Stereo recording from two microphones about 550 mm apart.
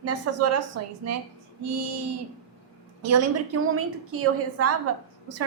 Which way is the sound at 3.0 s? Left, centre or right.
Right.